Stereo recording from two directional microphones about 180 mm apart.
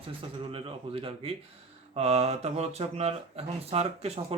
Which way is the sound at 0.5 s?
30° right (ahead or behind).